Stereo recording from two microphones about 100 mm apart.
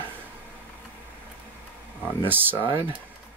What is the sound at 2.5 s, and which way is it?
Speech, 55° right (ahead or behind).